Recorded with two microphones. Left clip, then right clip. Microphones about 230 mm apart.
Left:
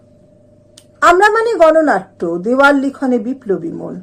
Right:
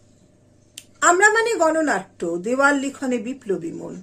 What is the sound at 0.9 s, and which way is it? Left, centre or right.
Speech, right.